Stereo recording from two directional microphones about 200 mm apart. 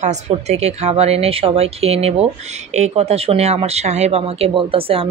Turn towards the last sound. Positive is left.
turn(degrees=-30)  # may be behind; listen again after turning